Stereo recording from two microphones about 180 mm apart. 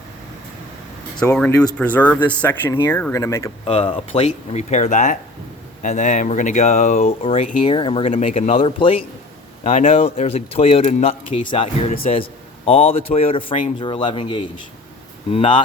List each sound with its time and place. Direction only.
1.2 s speech: 10° left (ahead or behind)
3.7 s a man's voice: 35° left (ahead or behind)